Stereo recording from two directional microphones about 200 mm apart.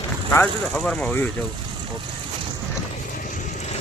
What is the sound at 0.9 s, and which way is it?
Speech, 10° left (ahead or behind).